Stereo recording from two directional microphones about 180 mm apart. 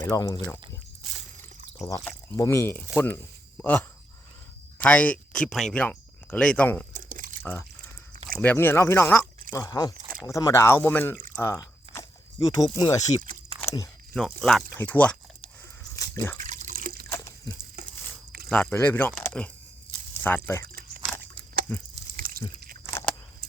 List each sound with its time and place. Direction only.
0.0 s speech: 15° left (ahead or behind)
1.8 s speech: 15° left (ahead or behind)
6.9 s crumpling: 50° right (ahead or behind)
7.4 s speech: 5° left (ahead or behind)
13.6 s biting: 15° left (ahead or behind)
14.1 s speech: 5° left (ahead or behind)
16.0 s a sound: 15° left (ahead or behind)
16.4 s water: 45° right (ahead or behind)
17.1 s a sound: 15° left (ahead or behind)
18.4 s speech: 5° left (ahead or behind)
21.7 s speech: 10° left (ahead or behind)
22.1 s drip: 50° right (ahead or behind)
22.9 s a sound: 15° left (ahead or behind)